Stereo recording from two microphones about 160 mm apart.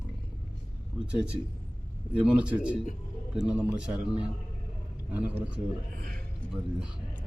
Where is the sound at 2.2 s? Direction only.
5° right (ahead or behind).